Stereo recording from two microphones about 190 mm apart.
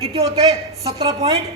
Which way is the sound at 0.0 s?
30° right (ahead or behind).